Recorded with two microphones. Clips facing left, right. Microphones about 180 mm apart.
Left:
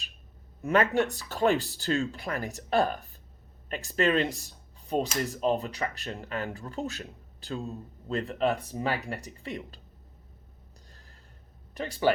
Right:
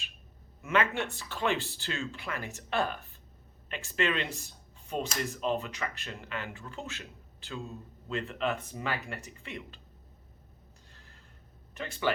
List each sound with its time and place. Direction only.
0.6 s speech: 40° left (ahead or behind)
11.7 s speech: 35° left (ahead or behind)